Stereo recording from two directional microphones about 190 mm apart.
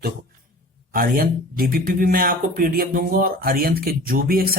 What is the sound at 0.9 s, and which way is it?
Speech, 50° right (ahead or behind).